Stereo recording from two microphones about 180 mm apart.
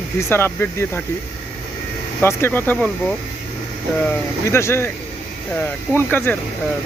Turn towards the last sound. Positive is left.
turn(degrees=10)  # may be behind; listen again after turning